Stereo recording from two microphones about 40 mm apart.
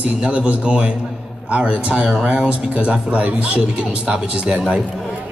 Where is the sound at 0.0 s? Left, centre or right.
Right.